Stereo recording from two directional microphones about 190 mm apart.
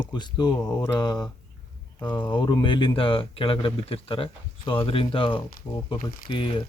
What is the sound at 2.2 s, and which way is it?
Speech, 25° left (ahead or behind).